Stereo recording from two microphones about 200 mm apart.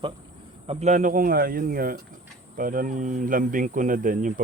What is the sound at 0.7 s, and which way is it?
Speech, 35° right (ahead or behind).